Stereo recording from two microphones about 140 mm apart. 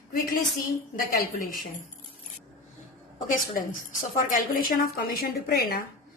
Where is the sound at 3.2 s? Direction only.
75° left (ahead or behind).